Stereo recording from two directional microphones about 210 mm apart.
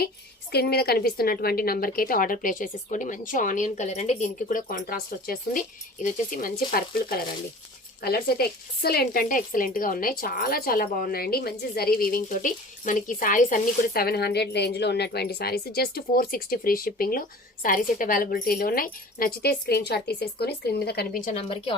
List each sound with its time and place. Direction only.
0.5 s speech: 50° left (ahead or behind)
21.3 s speech: 30° left (ahead or behind)